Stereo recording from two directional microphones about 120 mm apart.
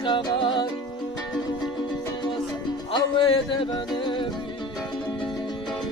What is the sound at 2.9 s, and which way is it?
Music, 45° left (ahead or behind).